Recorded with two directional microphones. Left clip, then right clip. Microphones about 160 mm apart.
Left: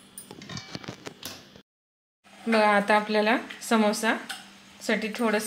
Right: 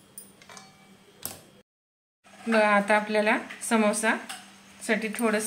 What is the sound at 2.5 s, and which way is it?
A woman's voice, 35° left (ahead or behind).